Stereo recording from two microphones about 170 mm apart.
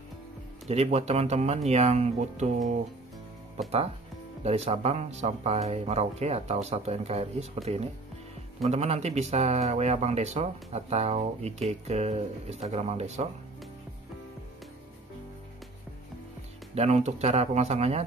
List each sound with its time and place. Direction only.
0.7 s speech: 40° right (ahead or behind)
4.4 s speech: 40° right (ahead or behind)
16.7 s speech: 40° right (ahead or behind)